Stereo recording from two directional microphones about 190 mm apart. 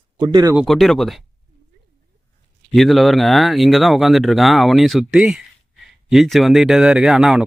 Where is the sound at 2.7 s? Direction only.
Centre (ahead or behind).